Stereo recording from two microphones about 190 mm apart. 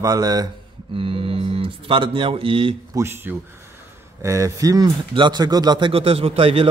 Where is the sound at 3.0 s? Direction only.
10° right (ahead or behind).